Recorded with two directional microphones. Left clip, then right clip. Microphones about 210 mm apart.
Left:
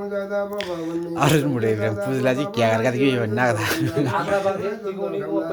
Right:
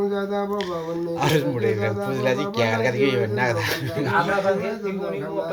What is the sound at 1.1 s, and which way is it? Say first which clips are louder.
Speech: left 3 dB; 50° left (ahead or behind).